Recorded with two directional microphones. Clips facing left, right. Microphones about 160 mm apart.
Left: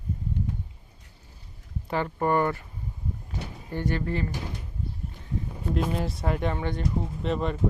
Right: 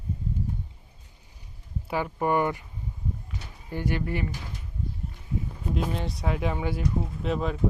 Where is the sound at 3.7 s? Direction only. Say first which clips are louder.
Left 1 dB; 10° right (ahead or behind).